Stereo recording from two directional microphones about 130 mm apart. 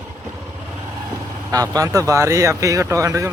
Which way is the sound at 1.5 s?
25° right (ahead or behind).